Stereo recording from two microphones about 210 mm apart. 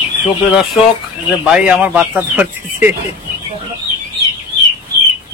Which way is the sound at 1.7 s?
5° right (ahead or behind).